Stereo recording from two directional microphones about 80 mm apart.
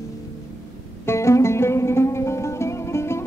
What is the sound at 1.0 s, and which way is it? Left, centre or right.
Music, left.